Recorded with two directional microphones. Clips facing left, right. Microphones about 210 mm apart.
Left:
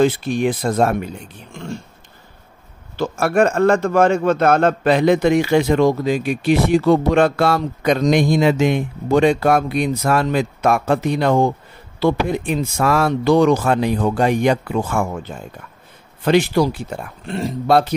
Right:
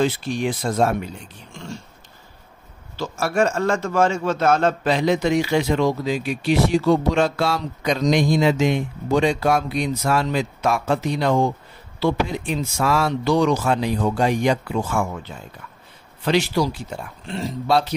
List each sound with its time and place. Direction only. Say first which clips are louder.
0.0 s a man's voice: left 5 dB; 55° left (ahead or behind)
3.0 s a man's voice: left 5 dB; 55° left (ahead or behind)